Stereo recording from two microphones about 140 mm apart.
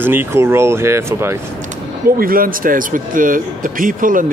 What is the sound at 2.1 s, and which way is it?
Speech, 90° right.